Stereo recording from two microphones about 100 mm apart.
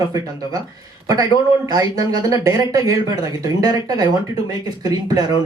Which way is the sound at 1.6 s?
35° right (ahead or behind).